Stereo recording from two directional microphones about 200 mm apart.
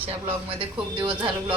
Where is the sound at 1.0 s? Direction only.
25° right (ahead or behind).